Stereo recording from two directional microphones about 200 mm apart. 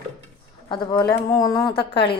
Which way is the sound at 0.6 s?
20° left (ahead or behind).